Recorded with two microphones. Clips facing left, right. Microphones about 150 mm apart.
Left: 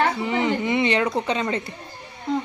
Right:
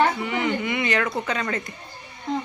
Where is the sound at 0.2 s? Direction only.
30° left (ahead or behind).